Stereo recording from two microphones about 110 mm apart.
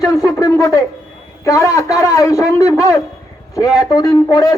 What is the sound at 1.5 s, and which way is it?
A man's voice, 30° left (ahead or behind).